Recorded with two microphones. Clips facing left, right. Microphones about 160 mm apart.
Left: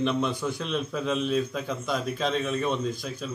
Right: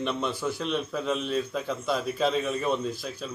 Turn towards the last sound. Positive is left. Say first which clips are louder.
# left 1 dB
turn(degrees=0)  # may be behind; listen again after turning